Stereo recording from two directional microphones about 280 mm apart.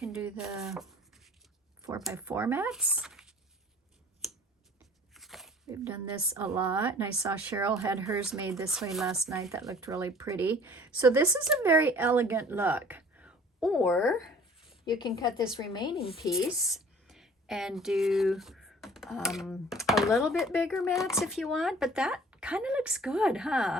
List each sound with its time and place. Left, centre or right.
0.0 s a sound: centre
2.0 s speech: centre
5.1 s a sound: centre
5.6 s a woman's voice: centre
14.8 s a woman's voice: centre
16.6 s speech: centre